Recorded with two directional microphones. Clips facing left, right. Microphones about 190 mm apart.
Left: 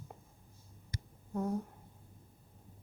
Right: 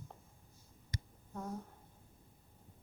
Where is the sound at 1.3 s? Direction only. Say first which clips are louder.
Left 8 dB; 15° left (ahead or behind).